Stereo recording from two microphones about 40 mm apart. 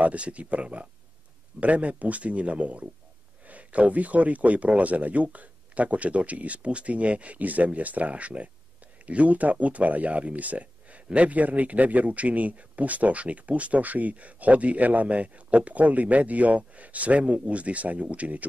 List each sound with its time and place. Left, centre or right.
0.0 s speech: right